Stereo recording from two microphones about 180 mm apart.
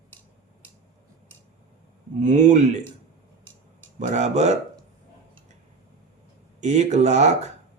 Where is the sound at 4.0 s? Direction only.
40° right (ahead or behind).